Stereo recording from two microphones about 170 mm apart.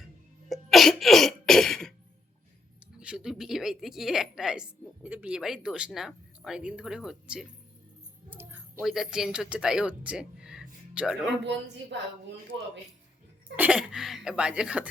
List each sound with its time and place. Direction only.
0.4 s cough: centre (ahead or behind)
3.0 s music: 5° right (ahead or behind)
5.0 s speech: 10° right (ahead or behind)
11.4 s a woman's voice: 90° right
13.6 s speech: 5° right (ahead or behind)